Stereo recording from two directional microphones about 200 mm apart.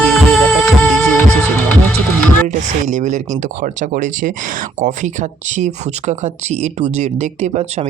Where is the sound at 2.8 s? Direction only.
35° right (ahead or behind).